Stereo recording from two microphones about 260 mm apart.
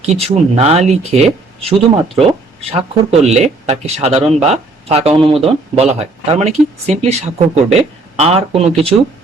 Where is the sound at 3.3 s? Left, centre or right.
Right.